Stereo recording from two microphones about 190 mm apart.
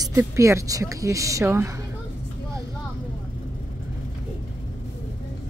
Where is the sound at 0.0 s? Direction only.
15° right (ahead or behind).